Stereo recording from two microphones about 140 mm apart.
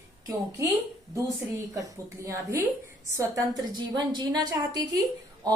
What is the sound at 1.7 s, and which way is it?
A woman's voice, 25° right (ahead or behind).